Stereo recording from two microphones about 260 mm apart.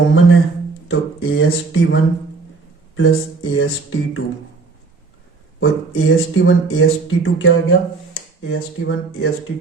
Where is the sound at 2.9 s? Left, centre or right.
Left.